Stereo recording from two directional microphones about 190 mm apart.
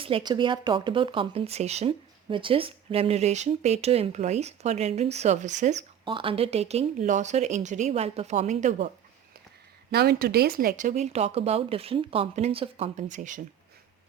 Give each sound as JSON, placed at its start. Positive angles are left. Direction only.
{"t": 0.0, "sound": "speech", "side_deg": -25}
{"t": 6.1, "sound": "speech", "side_deg": -25}
{"t": 9.9, "sound": "speech", "side_deg": -55}